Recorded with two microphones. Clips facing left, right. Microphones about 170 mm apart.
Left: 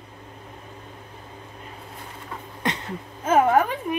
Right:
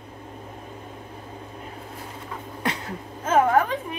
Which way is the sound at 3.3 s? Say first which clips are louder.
Left 1 dB; 10° left (ahead or behind).